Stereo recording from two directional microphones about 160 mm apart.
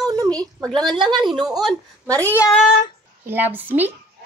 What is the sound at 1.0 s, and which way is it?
Speech, 30° right (ahead or behind).